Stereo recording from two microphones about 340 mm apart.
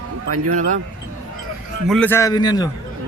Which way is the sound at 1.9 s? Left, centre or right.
Centre.